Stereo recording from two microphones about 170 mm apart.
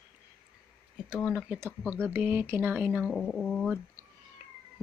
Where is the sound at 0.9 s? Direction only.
5° right (ahead or behind).